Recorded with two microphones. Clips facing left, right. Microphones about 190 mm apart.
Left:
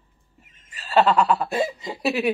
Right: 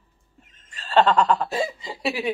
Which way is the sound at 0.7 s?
10° left (ahead or behind).